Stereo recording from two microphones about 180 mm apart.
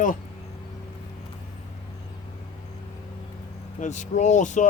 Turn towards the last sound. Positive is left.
turn(degrees=45)  # may be behind; listen again after turning